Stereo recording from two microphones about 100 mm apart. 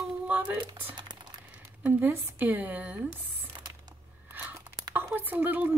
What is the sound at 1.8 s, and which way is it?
A woman's voice, 20° right (ahead or behind).